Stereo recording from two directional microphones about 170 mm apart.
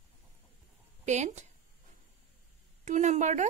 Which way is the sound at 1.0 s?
45° right (ahead or behind).